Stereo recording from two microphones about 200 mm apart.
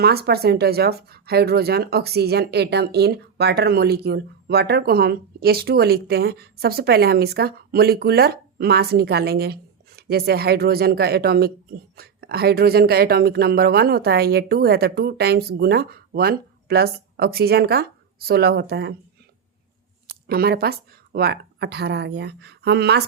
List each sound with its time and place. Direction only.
0.0 s speech: 50° right (ahead or behind)
20.2 s speech: 50° right (ahead or behind)